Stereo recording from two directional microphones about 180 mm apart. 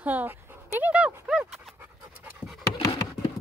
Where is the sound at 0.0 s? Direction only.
10° right (ahead or behind).